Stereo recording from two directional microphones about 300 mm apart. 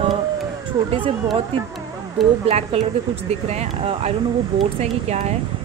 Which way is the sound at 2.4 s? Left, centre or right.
Centre.